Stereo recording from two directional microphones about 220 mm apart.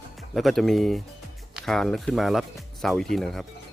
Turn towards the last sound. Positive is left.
turn(degrees=0)  # may be behind; listen again after turning